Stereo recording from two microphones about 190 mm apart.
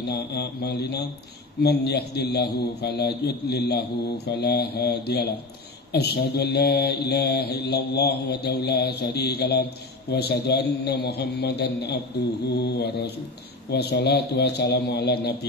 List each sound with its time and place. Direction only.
0.1 s mantra: 60° left (ahead or behind)